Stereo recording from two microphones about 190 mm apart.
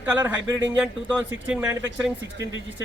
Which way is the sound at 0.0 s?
10° right (ahead or behind).